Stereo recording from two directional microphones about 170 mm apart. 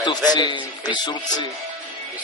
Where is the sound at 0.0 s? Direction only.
25° left (ahead or behind).